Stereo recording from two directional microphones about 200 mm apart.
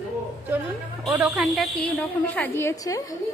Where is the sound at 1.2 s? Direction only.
5° right (ahead or behind); by 3.0 s 15° left (ahead or behind).